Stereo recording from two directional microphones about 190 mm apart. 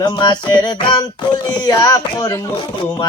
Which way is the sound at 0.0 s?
25° left (ahead or behind).